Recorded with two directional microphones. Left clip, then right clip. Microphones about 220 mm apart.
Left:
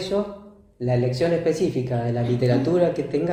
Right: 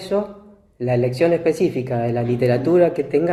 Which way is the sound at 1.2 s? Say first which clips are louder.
Right 5 dB; 35° right (ahead or behind).